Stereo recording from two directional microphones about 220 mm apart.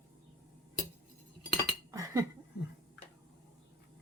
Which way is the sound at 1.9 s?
15° right (ahead or behind).